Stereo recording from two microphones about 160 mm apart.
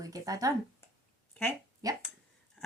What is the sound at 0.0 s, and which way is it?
Speech, 20° right (ahead or behind).